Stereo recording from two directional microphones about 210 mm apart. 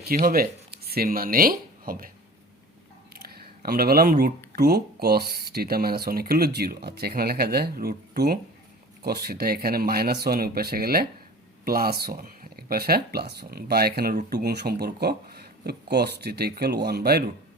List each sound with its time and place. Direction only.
0.1 s speech: 40° right (ahead or behind)
3.1 s a sound: 45° right (ahead or behind)
4.5 s speech: 50° right (ahead or behind)